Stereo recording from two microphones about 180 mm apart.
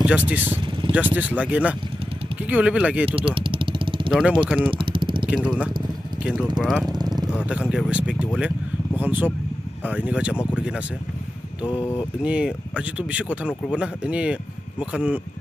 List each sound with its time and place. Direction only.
0.0 s speech: 10° right (ahead or behind)
3.1 s vehicle: 30° right (ahead or behind)
4.1 s speech: 5° right (ahead or behind)
4.6 s vehicle: 30° right (ahead or behind)
5.2 s speech: 5° right (ahead or behind)
6.9 s vehicle: 20° right (ahead or behind)
7.4 s speech: 5° right (ahead or behind)
8.4 s vehicle: 5° right (ahead or behind)
9.8 s speech: 10° right (ahead or behind)
11.7 s speech: 20° left (ahead or behind)
12.2 s speech: 5° right (ahead or behind)